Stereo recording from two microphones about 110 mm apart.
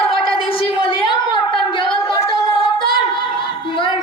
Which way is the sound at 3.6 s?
50° left (ahead or behind).